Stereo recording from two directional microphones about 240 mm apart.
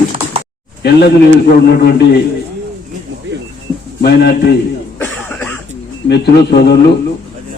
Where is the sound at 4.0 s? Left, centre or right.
Left.